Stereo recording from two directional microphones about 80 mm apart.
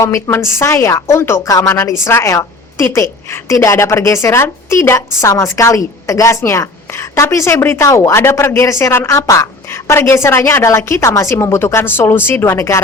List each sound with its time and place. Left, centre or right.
0.0 s a woman's voice: left